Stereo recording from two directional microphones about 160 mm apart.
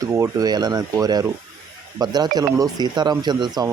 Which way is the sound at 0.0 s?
20° right (ahead or behind).